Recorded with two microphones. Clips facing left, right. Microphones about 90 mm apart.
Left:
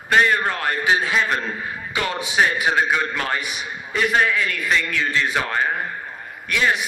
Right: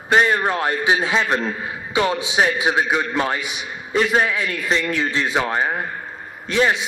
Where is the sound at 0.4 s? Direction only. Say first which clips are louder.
Right 2 dB; 20° right (ahead or behind).